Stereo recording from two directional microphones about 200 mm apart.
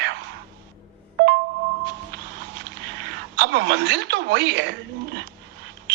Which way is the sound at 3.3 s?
55° right (ahead or behind).